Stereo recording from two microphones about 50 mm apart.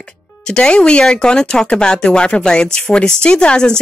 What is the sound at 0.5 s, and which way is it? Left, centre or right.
Speech, centre.